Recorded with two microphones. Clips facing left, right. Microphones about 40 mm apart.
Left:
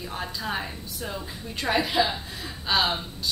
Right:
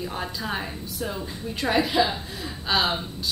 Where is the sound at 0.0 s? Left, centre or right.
Centre.